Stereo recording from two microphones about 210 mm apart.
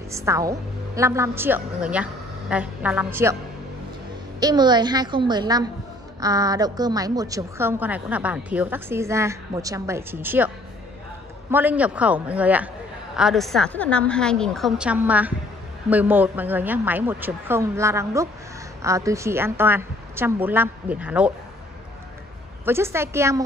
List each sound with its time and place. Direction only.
0.1 s a woman's voice: 15° right (ahead or behind)
4.4 s a woman's voice: 20° right (ahead or behind)
11.5 s a woman's voice: 5° right (ahead or behind)
22.7 s a woman's voice: 10° right (ahead or behind)